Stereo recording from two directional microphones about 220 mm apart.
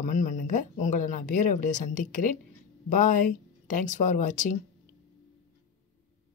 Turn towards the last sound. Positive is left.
turn(degrees=35)  # may be behind; listen again after turning